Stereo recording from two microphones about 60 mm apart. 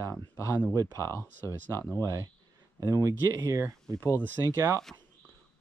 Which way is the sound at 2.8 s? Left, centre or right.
Right.